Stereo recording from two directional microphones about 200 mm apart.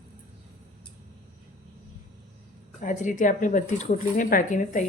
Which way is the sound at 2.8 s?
40° left (ahead or behind).